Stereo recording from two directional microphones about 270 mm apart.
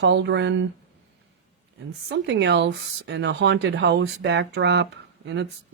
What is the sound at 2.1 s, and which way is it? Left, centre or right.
Speech, right.